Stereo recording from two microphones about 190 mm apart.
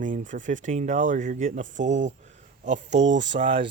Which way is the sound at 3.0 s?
70° right (ahead or behind).